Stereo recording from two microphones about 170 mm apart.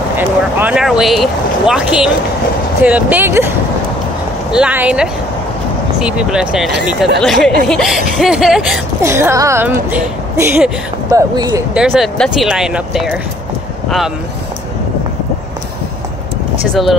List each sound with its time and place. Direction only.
0.2 s speech: 10° right (ahead or behind)
4.5 s speech: 5° right (ahead or behind)
9.0 s speech: 15° right (ahead or behind)
11.7 s speech: 5° right (ahead or behind)